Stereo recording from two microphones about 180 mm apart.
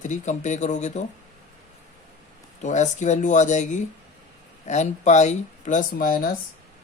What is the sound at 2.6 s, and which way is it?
Speech, 40° left (ahead or behind).